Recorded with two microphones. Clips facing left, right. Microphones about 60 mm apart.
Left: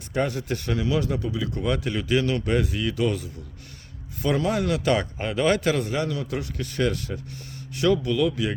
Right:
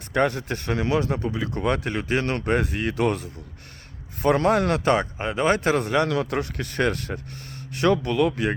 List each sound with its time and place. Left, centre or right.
0.1 s speech: right
5.1 s a man's voice: right
5.9 s speech: right